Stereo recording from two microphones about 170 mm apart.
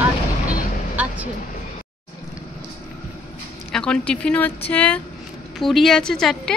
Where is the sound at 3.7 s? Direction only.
5° left (ahead or behind).